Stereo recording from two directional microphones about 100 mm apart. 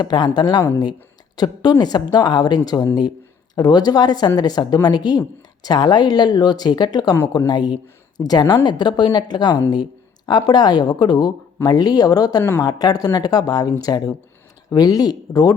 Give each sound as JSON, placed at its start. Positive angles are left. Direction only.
{"t": 0.0, "sound": "speech", "side_deg": 45}